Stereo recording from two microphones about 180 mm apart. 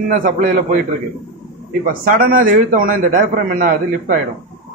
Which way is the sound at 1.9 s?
50° right (ahead or behind).